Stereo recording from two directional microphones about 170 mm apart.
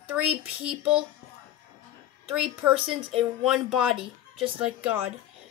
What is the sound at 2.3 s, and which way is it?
Speech, 10° right (ahead or behind).